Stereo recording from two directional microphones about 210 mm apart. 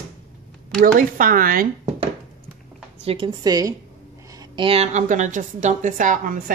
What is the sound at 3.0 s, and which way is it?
Speech, 25° right (ahead or behind).